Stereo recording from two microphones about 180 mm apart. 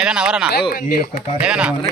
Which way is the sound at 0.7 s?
55° left (ahead or behind).